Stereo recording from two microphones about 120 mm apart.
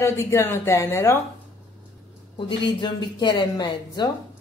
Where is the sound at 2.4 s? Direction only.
40° left (ahead or behind).